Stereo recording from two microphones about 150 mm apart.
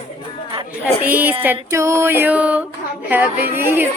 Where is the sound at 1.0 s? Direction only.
10° right (ahead or behind).